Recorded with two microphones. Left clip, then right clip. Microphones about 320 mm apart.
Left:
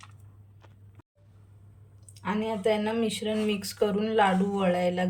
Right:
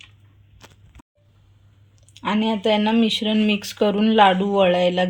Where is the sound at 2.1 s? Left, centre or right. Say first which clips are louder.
Right 8 dB; centre.